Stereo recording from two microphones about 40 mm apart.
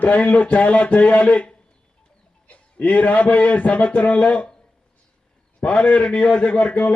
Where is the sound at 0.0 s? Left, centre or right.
Left.